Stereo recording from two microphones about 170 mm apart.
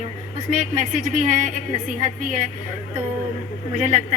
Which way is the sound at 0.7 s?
45° right (ahead or behind).